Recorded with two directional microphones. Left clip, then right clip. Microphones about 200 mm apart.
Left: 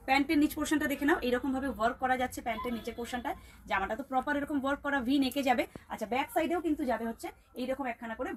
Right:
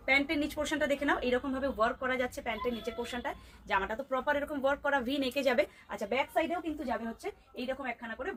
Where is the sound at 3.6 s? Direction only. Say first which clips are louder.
Right 1 dB; 40° right (ahead or behind).